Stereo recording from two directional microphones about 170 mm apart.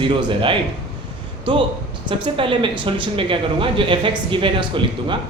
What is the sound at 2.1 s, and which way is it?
Speech, 30° right (ahead or behind).